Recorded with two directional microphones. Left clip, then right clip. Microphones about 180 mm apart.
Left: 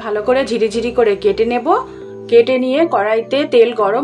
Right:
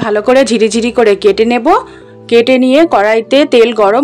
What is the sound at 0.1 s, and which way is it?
Speech, 55° right (ahead or behind).